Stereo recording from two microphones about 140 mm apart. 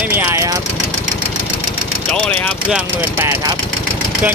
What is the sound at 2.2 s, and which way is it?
Speech, 10° left (ahead or behind).